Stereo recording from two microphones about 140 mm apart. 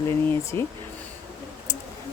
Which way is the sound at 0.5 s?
35° right (ahead or behind).